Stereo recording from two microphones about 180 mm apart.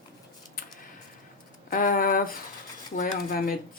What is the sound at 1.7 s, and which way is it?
Speech, 50° left (ahead or behind).